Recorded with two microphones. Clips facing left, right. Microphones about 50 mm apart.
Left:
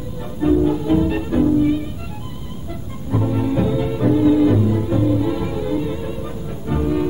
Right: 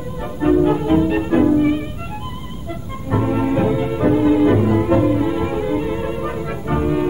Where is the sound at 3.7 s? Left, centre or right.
Right.